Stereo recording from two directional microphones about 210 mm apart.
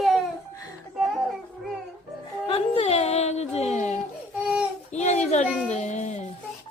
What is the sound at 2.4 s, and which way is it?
Music, 25° left (ahead or behind).